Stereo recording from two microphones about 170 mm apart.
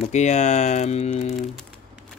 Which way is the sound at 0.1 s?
40° left (ahead or behind).